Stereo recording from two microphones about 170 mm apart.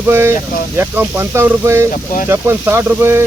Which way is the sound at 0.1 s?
15° right (ahead or behind).